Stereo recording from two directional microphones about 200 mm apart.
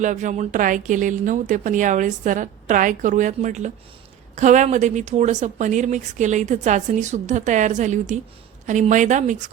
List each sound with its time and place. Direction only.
0.0 s speech: 40° right (ahead or behind)